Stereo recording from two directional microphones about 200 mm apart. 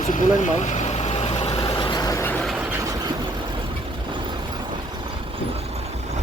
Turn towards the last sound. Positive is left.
turn(degrees=-30)  # may be behind; listen again after turning